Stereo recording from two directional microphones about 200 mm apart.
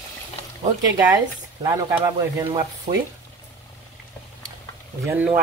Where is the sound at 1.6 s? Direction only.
20° right (ahead or behind).